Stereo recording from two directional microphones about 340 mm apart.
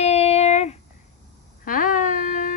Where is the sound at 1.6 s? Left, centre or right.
Left.